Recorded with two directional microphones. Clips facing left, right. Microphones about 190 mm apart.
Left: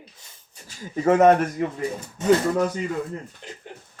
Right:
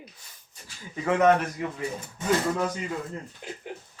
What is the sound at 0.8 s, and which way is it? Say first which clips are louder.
Speech: left 5 dB; 40° left (ahead or behind).